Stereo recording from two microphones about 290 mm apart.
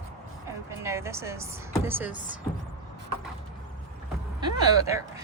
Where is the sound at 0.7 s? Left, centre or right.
Centre.